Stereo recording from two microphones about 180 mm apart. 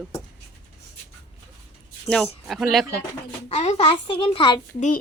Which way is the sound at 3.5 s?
35° left (ahead or behind).